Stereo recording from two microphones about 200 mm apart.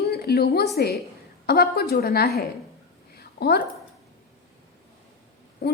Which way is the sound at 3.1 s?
55° left (ahead or behind).